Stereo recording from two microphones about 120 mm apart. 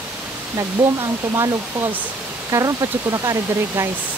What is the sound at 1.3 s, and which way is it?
Speech, 25° right (ahead or behind).